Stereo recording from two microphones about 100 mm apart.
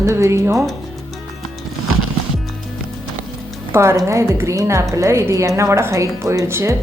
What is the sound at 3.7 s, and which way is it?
A woman's voice, 25° right (ahead or behind).